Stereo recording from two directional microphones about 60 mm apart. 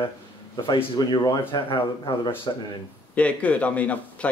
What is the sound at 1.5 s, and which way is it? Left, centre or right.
Speech, left.